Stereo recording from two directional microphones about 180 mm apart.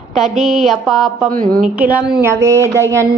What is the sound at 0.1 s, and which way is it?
A woman's voice, centre (ahead or behind).